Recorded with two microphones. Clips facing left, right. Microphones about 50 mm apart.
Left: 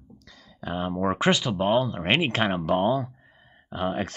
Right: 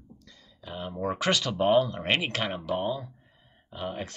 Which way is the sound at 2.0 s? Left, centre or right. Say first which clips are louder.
Left 5 dB; left.